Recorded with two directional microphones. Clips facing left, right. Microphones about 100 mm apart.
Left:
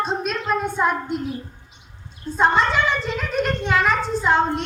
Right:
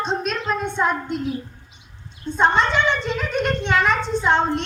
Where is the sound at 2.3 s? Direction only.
5° left (ahead or behind).